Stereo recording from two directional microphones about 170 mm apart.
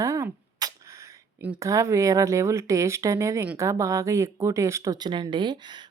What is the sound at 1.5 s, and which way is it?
Speech, 20° right (ahead or behind).